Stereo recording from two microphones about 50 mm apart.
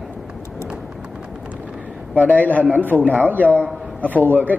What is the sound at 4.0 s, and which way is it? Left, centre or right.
Speech, left.